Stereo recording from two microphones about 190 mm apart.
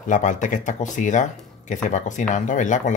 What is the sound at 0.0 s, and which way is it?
Speech, 40° left (ahead or behind).